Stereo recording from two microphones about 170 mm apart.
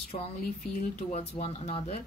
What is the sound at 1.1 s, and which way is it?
Speech, 40° left (ahead or behind).